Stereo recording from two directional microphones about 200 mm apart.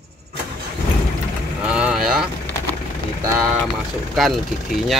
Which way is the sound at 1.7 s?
5° right (ahead or behind).